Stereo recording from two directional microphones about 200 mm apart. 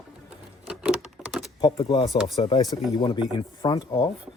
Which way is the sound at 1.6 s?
20° left (ahead or behind).